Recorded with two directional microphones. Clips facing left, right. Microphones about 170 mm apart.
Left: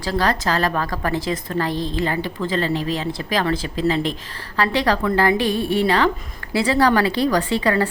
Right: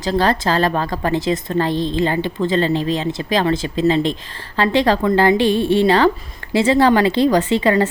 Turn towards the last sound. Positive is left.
turn(degrees=-20)  # may be behind; listen again after turning